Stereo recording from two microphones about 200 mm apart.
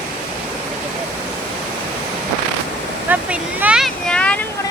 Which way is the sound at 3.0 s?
10° right (ahead or behind).